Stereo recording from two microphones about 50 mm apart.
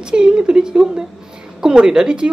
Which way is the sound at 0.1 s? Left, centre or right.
Centre.